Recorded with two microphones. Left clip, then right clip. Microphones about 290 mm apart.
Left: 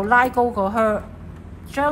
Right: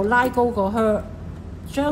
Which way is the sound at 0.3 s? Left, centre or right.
Left.